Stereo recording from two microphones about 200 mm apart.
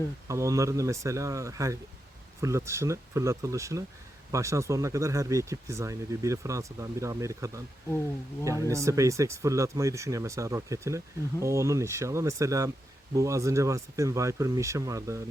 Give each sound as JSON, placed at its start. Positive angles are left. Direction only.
{"t": 0.3, "sound": "speech", "side_deg": -15}